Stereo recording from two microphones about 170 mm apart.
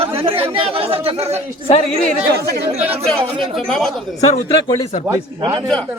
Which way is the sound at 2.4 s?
70° right (ahead or behind).